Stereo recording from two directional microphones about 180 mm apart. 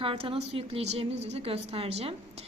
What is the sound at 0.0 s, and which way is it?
Speech, 30° right (ahead or behind).